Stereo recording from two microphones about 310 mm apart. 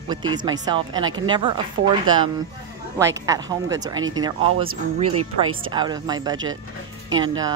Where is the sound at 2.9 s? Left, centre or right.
Centre.